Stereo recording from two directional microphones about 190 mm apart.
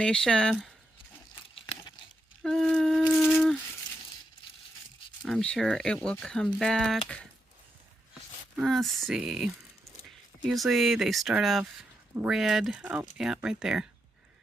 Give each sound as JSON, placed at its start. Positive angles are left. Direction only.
{"t": 0.0, "sound": "speech", "side_deg": 5}
{"t": 1.4, "sound": "a sound", "side_deg": 25}
{"t": 2.4, "sound": "humming", "side_deg": 0}
{"t": 5.2, "sound": "speech", "side_deg": 5}
{"t": 8.5, "sound": "speech", "side_deg": 0}